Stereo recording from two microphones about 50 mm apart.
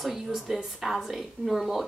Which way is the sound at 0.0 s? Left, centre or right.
Centre.